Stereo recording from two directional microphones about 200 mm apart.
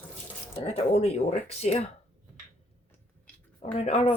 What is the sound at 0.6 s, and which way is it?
Speech, 30° left (ahead or behind).